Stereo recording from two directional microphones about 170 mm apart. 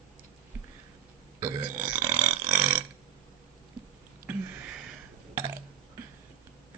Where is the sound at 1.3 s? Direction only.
15° right (ahead or behind).